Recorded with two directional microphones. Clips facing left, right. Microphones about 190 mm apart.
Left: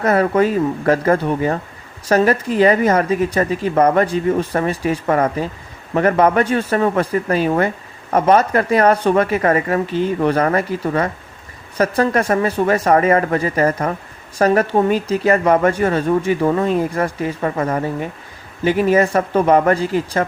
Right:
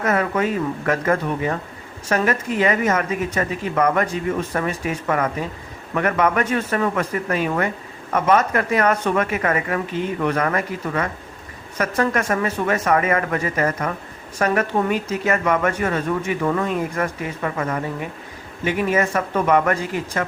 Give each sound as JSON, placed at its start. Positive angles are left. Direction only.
{"t": 0.0, "sound": "speech", "side_deg": 35}